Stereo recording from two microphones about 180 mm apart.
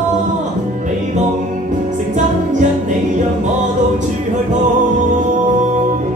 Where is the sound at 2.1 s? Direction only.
45° right (ahead or behind).